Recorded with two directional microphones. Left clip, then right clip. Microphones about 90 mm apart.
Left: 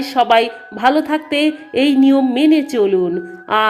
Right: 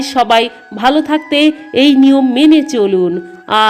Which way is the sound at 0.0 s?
35° right (ahead or behind).